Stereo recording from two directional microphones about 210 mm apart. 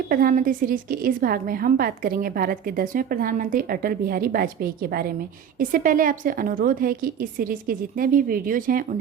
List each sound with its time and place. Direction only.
0.1 s a woman's voice: 40° right (ahead or behind)